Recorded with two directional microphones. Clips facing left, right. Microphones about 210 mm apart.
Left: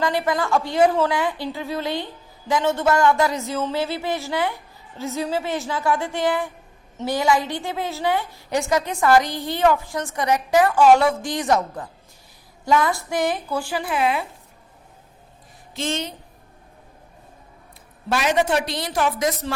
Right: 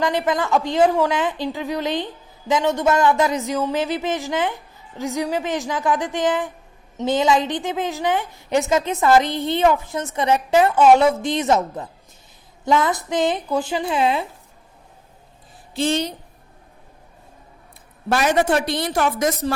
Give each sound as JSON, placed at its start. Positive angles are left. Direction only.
{"t": 0.0, "sound": "a woman's voice", "side_deg": -20}
{"t": 15.7, "sound": "a woman's voice", "side_deg": -35}
{"t": 18.1, "sound": "speech", "side_deg": -55}